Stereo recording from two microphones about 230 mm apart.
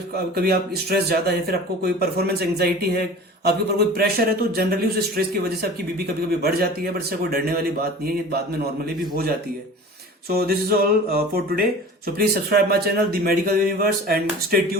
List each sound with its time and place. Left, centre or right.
0.3 s speech: right
6.4 s speech: right
10.2 s speech: right